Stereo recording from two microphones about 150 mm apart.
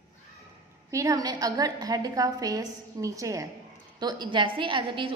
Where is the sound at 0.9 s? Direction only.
20° right (ahead or behind).